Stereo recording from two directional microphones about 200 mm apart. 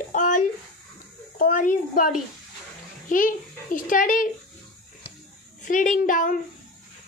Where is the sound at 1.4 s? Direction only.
40° left (ahead or behind).